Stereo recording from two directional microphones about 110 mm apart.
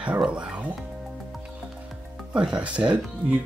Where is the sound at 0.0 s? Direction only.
10° right (ahead or behind).